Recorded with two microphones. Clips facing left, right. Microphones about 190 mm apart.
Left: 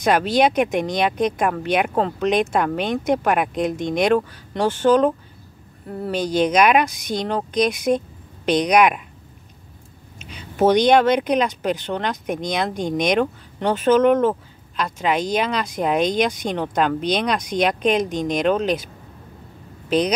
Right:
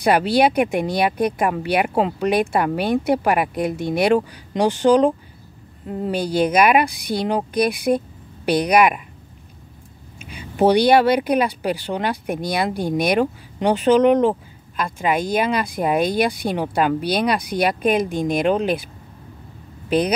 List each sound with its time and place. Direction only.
0.1 s speech: 10° right (ahead or behind)
10.3 s speech: 10° right (ahead or behind)